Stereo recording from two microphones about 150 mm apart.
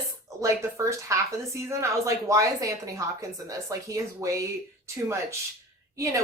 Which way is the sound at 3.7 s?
20° right (ahead or behind).